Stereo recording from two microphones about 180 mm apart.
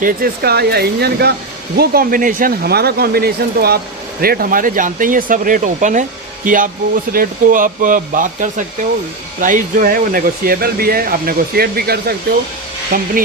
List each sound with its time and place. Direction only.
0.0 s speech: 55° right (ahead or behind)